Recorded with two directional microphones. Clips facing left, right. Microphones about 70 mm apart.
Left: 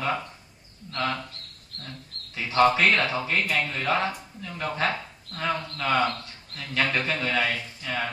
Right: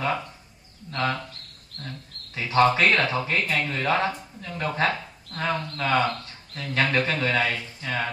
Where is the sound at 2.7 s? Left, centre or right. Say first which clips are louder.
Right 1 dB; right.